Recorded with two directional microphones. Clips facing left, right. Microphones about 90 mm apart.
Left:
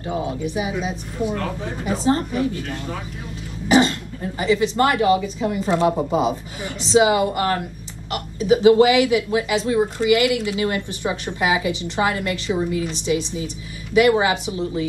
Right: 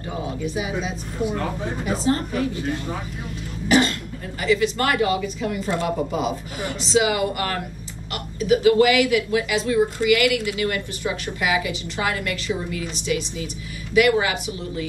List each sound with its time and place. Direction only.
0.6 s a woman's voice: 20° left (ahead or behind)
1.2 s speech: 15° right (ahead or behind)
1.9 s a woman's voice: 20° left (ahead or behind)
2.5 s speech: 20° right (ahead or behind)
3.6 s a woman's voice: 20° left (ahead or behind)